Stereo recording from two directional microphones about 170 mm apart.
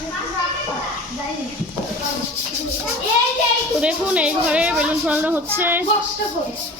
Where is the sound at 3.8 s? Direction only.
5° right (ahead or behind).